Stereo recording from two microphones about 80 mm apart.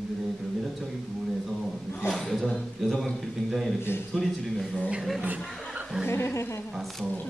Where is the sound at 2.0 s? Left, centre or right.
Centre.